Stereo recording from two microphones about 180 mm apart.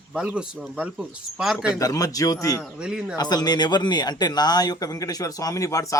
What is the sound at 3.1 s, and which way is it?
Speech, 20° left (ahead or behind).